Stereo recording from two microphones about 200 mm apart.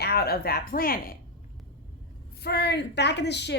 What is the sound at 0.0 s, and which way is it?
Speech, 55° left (ahead or behind).